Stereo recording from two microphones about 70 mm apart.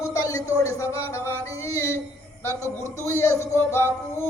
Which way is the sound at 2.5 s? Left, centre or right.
Left.